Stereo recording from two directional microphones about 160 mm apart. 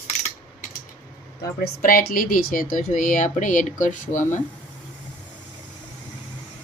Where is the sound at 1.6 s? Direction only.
60° left (ahead or behind).